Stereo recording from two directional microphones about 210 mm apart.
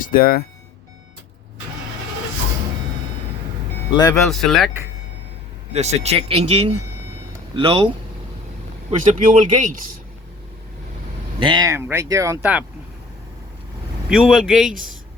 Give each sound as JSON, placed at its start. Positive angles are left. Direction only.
{"t": 0.0, "sound": "speech", "side_deg": 45}
{"t": 3.9, "sound": "speech", "side_deg": 20}
{"t": 4.3, "sound": "a man's voice", "side_deg": 0}
{"t": 5.7, "sound": "speech", "side_deg": -30}
{"t": 8.9, "sound": "speech", "side_deg": -35}
{"t": 11.3, "sound": "speech", "side_deg": -20}
{"t": 14.1, "sound": "a man's voice", "side_deg": 0}